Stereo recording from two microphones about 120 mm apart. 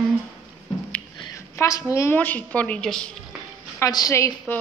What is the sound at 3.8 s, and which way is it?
Speech, 30° left (ahead or behind).